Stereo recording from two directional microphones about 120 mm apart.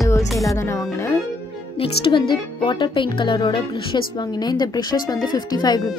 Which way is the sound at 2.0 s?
45° left (ahead or behind).